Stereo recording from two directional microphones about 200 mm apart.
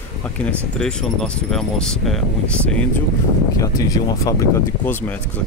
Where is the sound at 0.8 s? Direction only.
5° left (ahead or behind).